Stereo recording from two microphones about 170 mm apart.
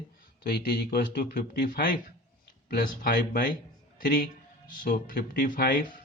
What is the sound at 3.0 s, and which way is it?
A man's voice, 55° left (ahead or behind).